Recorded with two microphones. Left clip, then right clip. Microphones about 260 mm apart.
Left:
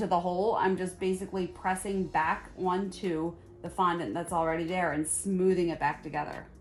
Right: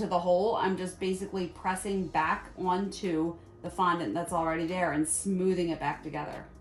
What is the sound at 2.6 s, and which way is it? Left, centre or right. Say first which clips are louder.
A woman's voice: right 1 dB; centre.